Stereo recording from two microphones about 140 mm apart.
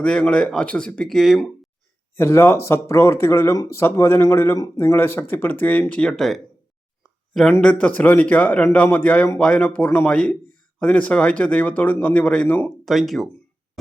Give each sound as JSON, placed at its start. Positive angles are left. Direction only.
{"t": 0.0, "sound": "speech", "side_deg": 5}
{"t": 2.1, "sound": "speech", "side_deg": 15}
{"t": 7.6, "sound": "speech", "side_deg": 10}
{"t": 12.8, "sound": "speech", "side_deg": 0}